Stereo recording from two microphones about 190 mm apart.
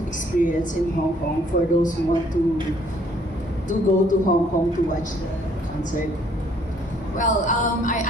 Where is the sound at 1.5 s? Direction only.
50° left (ahead or behind).